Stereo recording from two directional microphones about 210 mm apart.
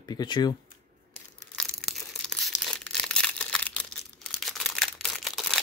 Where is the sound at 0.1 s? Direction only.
20° left (ahead or behind).